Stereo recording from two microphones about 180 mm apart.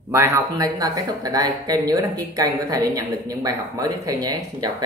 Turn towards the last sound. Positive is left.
turn(degrees=-20)  # may be behind; listen again after turning